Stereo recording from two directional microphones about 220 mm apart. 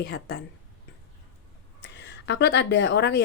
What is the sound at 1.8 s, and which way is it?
Speech, 55° left (ahead or behind).